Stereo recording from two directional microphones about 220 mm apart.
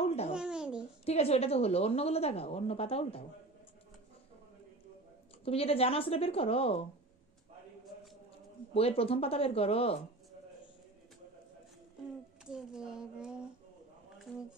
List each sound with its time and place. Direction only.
0.0 s babbling: 30° left (ahead or behind)
0.3 s babbling: 5° right (ahead or behind)
1.0 s a woman's voice: 30° left (ahead or behind)
5.4 s a woman's voice: 25° left (ahead or behind)
8.7 s a woman's voice: 25° left (ahead or behind)
12.4 s speech: 5° right (ahead or behind)